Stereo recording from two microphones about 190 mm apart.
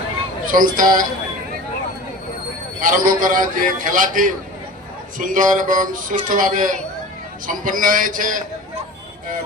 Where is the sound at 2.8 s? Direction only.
45° right (ahead or behind).